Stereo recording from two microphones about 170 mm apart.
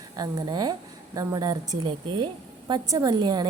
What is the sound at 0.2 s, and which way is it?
A woman's voice, 25° right (ahead or behind).